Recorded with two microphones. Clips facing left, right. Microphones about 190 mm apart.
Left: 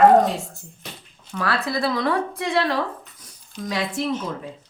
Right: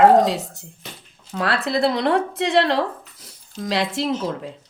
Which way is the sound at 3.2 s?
85° right.